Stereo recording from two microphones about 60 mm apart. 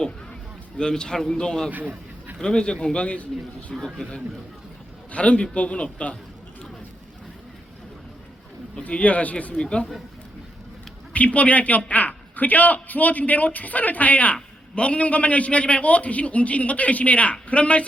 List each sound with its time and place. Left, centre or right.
0.8 s a man's voice: centre
1.7 s a sound: right
2.4 s a man's voice: centre
3.8 s a man's voice: centre
5.1 s a man's voice: centre
8.8 s a man's voice: left
9.6 s a man's voice: centre
11.1 s a man's voice: left